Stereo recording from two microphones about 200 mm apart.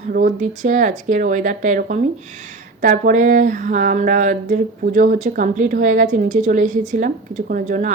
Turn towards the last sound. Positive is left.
turn(degrees=-40)  # may be behind; listen again after turning